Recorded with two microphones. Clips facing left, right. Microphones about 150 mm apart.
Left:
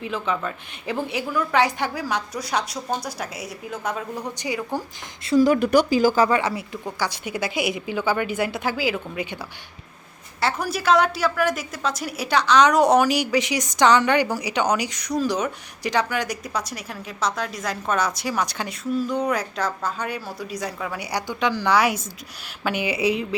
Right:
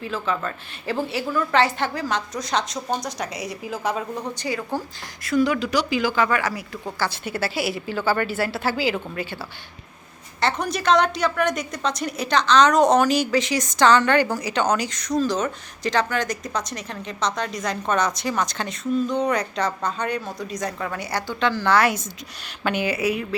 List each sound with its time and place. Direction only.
0.0 s a woman's voice: 15° left (ahead or behind); by 4.0 s centre (ahead or behind)
4.4 s a woman's voice: 15° left (ahead or behind)
5.2 s speech: 30° left (ahead or behind)
5.5 s speech: 50° left (ahead or behind)
5.9 s speech: 40° left (ahead or behind)
6.3 s speech: 25° left (ahead or behind)
7.0 s a woman's voice: 15° left (ahead or behind)
10.4 s a woman's voice: 5° left (ahead or behind)